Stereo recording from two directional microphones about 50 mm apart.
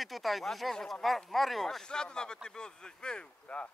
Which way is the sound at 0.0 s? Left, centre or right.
Centre.